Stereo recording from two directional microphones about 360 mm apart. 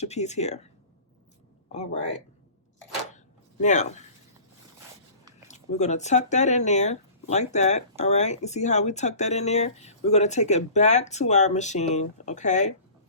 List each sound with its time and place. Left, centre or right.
0.0 s speech: centre
1.7 s speech: centre
3.6 s speech: centre
5.5 s speech: centre